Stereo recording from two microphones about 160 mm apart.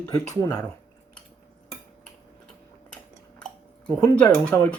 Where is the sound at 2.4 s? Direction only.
5° left (ahead or behind).